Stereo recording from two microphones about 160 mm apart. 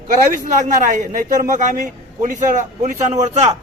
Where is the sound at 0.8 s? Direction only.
55° right (ahead or behind).